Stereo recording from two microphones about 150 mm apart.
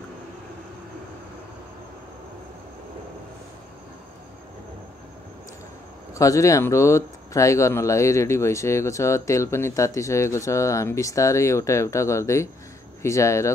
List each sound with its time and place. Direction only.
6.1 s speech: 20° left (ahead or behind)